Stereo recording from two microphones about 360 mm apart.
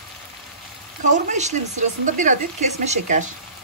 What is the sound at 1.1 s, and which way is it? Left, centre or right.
Speech, centre.